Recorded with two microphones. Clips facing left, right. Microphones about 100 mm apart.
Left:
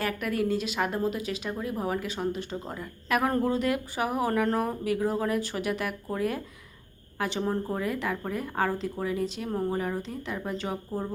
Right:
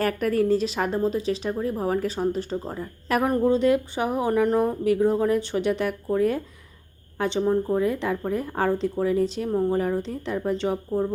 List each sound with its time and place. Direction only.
0.0 s speech: 40° right (ahead or behind)
3.2 s speech: 25° right (ahead or behind)
7.2 s speech: 25° right (ahead or behind)
7.4 s speech: 5° right (ahead or behind)
7.8 s speech: 30° right (ahead or behind)
9.5 s speech: centre (ahead or behind)
9.7 s speech: 35° right (ahead or behind)